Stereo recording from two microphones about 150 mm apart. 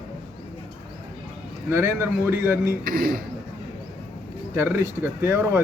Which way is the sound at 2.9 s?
80° right.